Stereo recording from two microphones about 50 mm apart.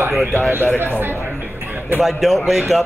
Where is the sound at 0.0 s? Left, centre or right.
Right.